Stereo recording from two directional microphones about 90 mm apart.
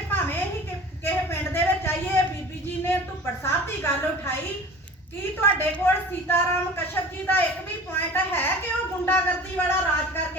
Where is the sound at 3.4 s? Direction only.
25° left (ahead or behind).